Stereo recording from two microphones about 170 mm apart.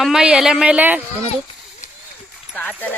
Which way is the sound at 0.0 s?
5° right (ahead or behind).